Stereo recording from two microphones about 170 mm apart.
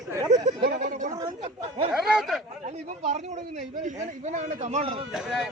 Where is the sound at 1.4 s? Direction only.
40° right (ahead or behind).